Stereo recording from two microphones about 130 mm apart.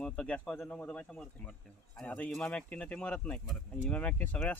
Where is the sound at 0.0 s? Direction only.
10° left (ahead or behind).